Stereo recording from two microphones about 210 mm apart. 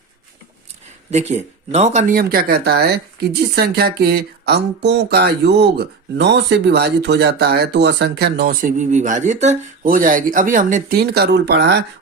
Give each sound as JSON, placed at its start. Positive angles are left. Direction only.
{"t": 1.1, "sound": "speech", "side_deg": -30}